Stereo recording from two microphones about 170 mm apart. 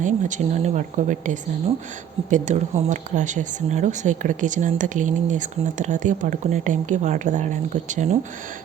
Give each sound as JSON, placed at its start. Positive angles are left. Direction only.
{"t": 0.0, "sound": "speech", "side_deg": -45}